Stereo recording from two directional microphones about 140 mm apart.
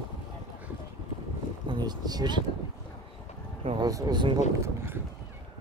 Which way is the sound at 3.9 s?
25° right (ahead or behind).